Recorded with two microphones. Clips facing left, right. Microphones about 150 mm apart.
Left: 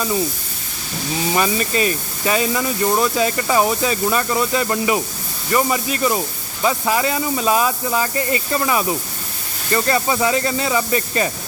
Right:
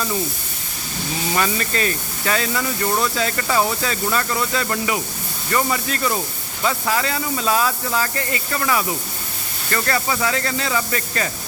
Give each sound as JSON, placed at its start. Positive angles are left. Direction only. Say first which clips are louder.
{"t": 1.3, "sound": "speech", "louder": "left 3 dB", "side_deg": 15}